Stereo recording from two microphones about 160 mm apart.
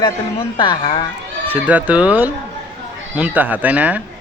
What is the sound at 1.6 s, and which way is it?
A man's voice, 10° right (ahead or behind).